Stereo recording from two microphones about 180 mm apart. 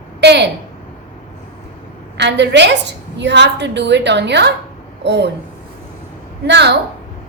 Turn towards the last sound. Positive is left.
turn(degrees=-70)  # may be behind; listen again after turning